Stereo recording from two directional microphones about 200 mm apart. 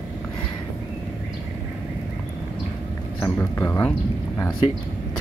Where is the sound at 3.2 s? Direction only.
10° left (ahead or behind).